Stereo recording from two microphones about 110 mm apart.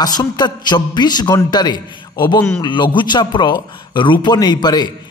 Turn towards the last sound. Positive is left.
turn(degrees=40)  # may be behind; listen again after turning